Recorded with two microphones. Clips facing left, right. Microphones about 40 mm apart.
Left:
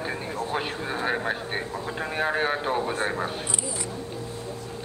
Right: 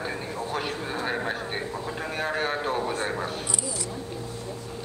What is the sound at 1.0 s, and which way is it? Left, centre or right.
A man's voice, centre.